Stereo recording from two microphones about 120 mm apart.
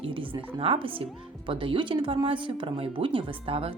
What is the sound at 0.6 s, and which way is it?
Speech, 50° right (ahead or behind).